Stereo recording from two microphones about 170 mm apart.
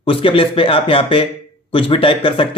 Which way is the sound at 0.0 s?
30° left (ahead or behind).